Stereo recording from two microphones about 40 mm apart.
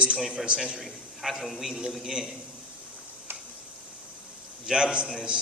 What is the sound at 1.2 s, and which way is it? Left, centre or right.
Speech, centre.